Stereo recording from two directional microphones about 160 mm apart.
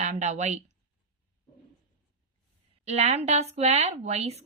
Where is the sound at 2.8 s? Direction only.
45° right (ahead or behind).